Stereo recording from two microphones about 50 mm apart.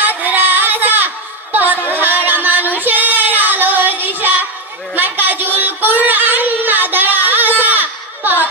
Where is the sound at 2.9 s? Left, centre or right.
Right.